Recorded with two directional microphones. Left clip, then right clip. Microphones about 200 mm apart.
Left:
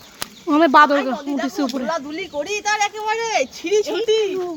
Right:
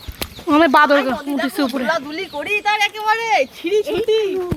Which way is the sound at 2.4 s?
20° left (ahead or behind).